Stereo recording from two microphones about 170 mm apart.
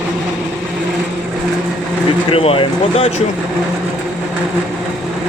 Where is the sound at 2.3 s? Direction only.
35° left (ahead or behind).